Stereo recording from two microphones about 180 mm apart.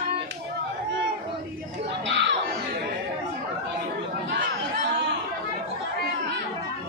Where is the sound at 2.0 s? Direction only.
85° right.